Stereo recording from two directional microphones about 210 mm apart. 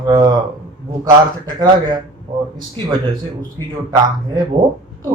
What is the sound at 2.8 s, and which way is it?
Speech, 15° right (ahead or behind).